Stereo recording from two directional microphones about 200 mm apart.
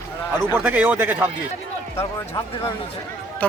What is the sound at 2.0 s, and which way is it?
Speech, 15° left (ahead or behind).